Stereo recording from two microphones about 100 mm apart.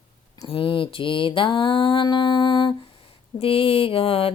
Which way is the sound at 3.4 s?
65° left (ahead or behind).